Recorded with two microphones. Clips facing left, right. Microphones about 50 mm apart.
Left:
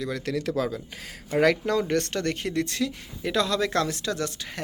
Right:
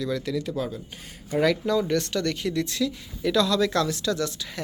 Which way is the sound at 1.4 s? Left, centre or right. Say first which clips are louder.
Left 1 dB; left.